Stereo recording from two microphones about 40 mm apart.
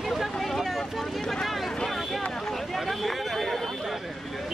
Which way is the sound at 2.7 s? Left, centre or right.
Centre.